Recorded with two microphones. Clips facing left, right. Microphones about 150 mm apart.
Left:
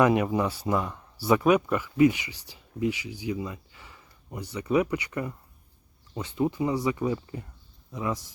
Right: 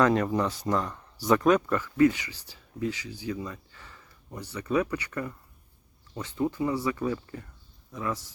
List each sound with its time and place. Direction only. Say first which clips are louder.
0.0 s speech: left 1 dB; 10° left (ahead or behind)